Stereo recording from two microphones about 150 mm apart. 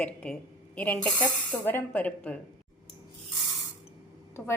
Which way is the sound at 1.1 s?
30° left (ahead or behind).